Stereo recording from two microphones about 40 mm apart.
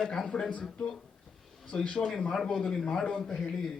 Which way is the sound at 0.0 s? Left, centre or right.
Centre.